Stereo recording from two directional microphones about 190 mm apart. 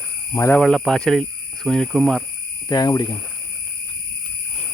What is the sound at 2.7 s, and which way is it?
Speech, 20° left (ahead or behind).